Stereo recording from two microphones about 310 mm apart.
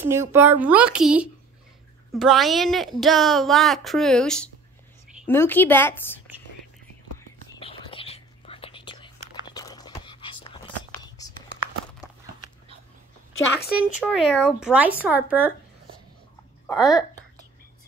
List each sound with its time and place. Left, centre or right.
0.0 s a woman's voice: centre
7.2 s whispering: centre
13.3 s speech: left
13.9 s a woman's voice: centre
16.6 s speech: centre